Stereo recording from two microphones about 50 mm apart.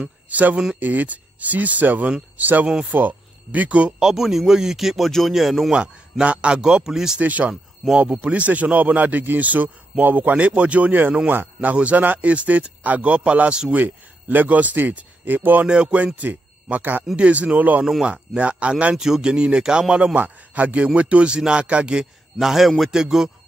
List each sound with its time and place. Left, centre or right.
0.0 s speech: right
2.6 s speech: centre
2.9 s speech: right
4.0 s speech: centre
5.8 s speech: right
7.2 s speech: right
13.7 s speech: right
15.6 s speech: right
17.0 s speech: right
18.9 s speech: centre
20.2 s speech: right
22.4 s speech: centre